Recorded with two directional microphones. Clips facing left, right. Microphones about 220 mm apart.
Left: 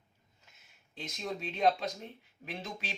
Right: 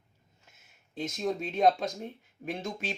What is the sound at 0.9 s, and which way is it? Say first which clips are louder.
Speech: right 7 dB; 45° right (ahead or behind).